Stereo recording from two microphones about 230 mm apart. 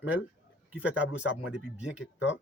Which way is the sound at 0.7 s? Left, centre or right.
Centre.